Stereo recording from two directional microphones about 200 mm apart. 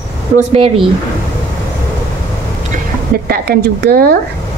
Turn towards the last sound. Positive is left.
turn(degrees=-50)  # may be behind; listen again after turning